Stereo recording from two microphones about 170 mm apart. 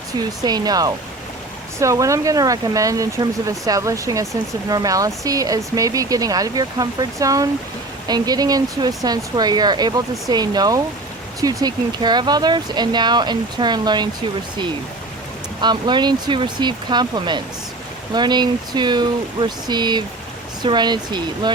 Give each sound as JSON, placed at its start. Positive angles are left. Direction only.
{"t": 0.2, "sound": "speech", "side_deg": -25}
{"t": 15.6, "sound": "speech", "side_deg": -25}